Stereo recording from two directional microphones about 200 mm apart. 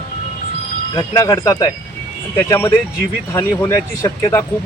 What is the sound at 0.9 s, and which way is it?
Speech, 20° left (ahead or behind).